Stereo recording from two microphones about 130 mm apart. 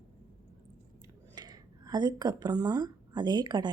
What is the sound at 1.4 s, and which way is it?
Speech, 30° right (ahead or behind).